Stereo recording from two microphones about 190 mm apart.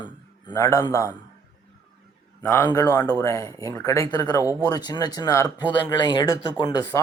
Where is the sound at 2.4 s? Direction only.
10° left (ahead or behind).